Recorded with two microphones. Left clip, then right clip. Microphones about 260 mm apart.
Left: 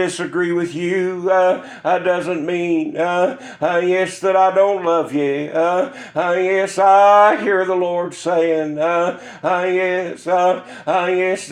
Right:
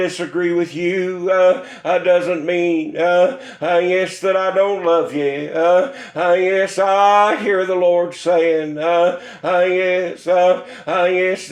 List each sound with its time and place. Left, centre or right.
0.0 s a man's voice: left